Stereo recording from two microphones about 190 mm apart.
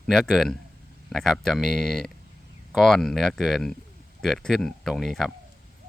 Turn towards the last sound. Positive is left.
turn(degrees=0)  # may be behind; listen again after turning